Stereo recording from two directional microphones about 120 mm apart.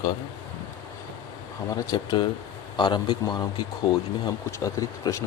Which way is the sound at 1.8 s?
35° left (ahead or behind).